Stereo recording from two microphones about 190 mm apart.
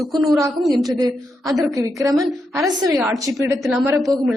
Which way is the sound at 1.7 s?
20° right (ahead or behind).